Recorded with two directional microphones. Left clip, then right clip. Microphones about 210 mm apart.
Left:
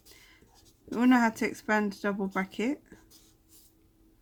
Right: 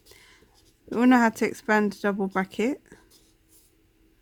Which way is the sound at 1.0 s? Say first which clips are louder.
Right 5 dB; 45° right (ahead or behind).